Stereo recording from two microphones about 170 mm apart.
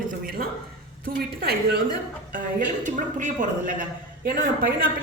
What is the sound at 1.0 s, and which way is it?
A woman's voice, 60° right (ahead or behind).